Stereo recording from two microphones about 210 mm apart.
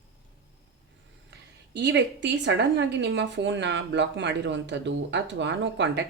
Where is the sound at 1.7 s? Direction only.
55° right (ahead or behind).